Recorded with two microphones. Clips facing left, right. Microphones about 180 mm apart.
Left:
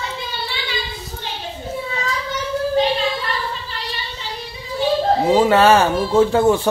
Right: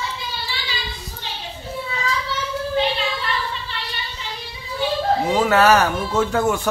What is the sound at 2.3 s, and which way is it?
Child singing, 40° left (ahead or behind).